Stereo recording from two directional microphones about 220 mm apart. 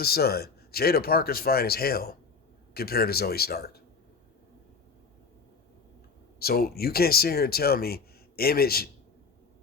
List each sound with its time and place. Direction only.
0.0 s speech: 45° left (ahead or behind)
6.4 s speech: 45° left (ahead or behind)